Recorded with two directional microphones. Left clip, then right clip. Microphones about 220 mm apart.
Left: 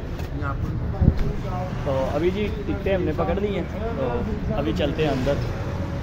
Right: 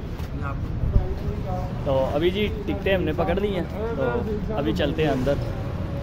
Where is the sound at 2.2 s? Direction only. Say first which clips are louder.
Right 1 dB; 15° right (ahead or behind).